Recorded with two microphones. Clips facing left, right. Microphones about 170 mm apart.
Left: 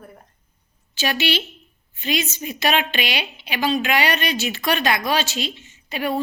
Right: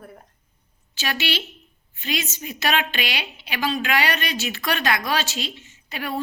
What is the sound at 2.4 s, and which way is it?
A woman's voice, 20° left (ahead or behind).